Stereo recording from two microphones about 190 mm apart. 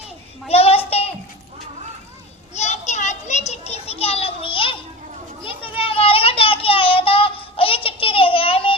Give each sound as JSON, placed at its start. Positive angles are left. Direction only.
{"t": 0.4, "sound": "child singing", "side_deg": 30}
{"t": 2.6, "sound": "a sound", "side_deg": 35}
{"t": 5.4, "sound": "children playing", "side_deg": 30}